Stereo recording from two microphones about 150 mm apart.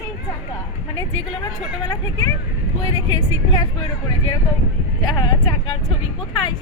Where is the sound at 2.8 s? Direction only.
25° left (ahead or behind).